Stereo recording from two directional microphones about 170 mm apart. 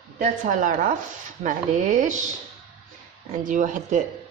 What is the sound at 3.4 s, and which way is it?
Speech, 50° right (ahead or behind).